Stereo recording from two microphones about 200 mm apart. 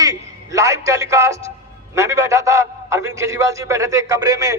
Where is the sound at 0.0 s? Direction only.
15° right (ahead or behind).